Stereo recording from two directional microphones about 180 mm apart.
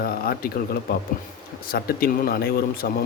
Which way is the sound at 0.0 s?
55° left (ahead or behind).